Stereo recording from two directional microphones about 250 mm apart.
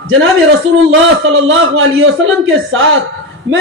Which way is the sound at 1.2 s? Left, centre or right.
Right.